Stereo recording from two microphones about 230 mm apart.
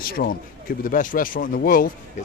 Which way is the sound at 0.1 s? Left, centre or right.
Left.